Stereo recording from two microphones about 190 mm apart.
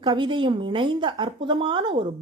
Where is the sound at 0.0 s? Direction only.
25° right (ahead or behind).